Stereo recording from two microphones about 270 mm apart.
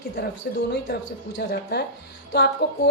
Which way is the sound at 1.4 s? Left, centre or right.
Left.